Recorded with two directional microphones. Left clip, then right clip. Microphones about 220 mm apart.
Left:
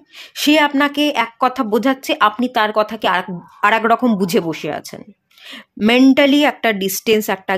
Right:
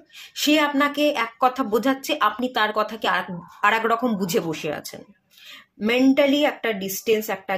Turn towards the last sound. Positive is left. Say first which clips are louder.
# left 6 dB
turn(degrees=45)  # may be behind; listen again after turning